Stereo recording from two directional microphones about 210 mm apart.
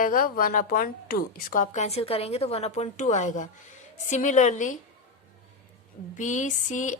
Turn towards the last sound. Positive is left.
turn(degrees=35)  # may be behind; listen again after turning